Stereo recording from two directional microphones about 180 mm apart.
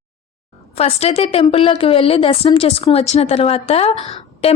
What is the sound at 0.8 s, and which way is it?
A woman's voice, 35° left (ahead or behind).